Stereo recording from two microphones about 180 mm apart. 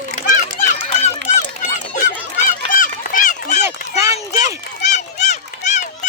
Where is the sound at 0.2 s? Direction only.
45° left (ahead or behind).